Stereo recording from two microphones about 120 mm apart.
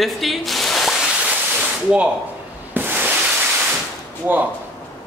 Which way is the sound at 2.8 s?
15° right (ahead or behind).